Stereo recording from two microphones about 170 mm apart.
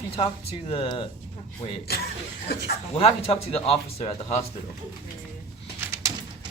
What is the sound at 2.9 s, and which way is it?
Speech, 35° left (ahead or behind).